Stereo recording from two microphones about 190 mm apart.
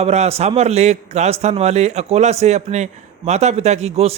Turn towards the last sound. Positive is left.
turn(degrees=-35)  # may be behind; listen again after turning